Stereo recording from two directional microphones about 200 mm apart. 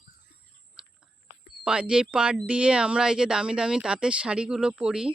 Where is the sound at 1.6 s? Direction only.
5° right (ahead or behind).